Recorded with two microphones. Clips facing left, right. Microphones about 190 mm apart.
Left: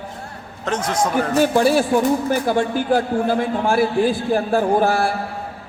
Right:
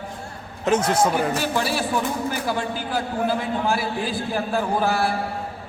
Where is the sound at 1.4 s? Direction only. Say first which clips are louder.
Left 8 dB; 50° left (ahead or behind).